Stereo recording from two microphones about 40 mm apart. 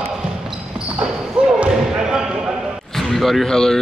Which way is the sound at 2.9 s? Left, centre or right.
Centre.